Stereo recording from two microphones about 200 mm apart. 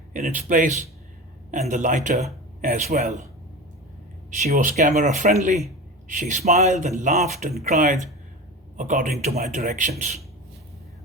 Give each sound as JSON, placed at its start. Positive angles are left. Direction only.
{"t": 0.1, "sound": "speech", "side_deg": -40}
{"t": 4.3, "sound": "a man's voice", "side_deg": -40}